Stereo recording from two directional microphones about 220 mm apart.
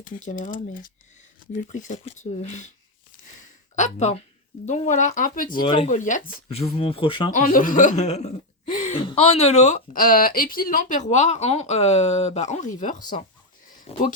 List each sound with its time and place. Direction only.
0.0 s speech: 35° left (ahead or behind)
3.8 s speech: 30° left (ahead or behind)
5.6 s speech: 20° left (ahead or behind)
5.9 s speech: 35° left (ahead or behind)
7.3 s speech: 35° left (ahead or behind)